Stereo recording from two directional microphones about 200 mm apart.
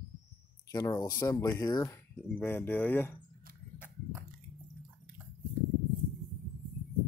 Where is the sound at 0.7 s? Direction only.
20° left (ahead or behind).